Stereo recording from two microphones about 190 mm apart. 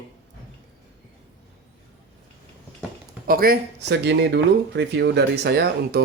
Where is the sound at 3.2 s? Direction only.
50° right (ahead or behind).